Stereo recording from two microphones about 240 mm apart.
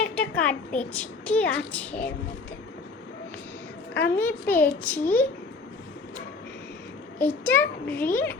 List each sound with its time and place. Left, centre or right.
0.0 s a sound: centre
0.9 s speech: centre
4.1 s a child's voice: centre
7.2 s a child's voice: centre